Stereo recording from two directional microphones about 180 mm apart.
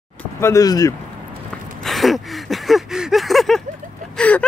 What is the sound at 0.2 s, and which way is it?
Speech, 15° left (ahead or behind).